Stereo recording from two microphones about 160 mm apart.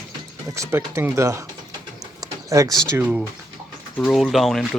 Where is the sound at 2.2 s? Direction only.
20° right (ahead or behind).